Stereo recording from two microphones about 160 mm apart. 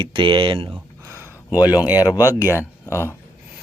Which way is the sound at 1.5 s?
25° left (ahead or behind).